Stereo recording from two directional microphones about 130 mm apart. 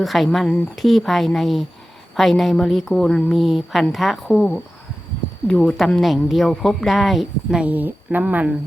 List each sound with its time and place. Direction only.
0.0 s a woman's voice: centre (ahead or behind)